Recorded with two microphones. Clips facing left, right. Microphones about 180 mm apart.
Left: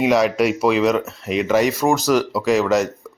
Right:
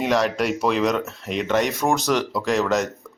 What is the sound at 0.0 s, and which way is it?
A man's voice, 5° left (ahead or behind).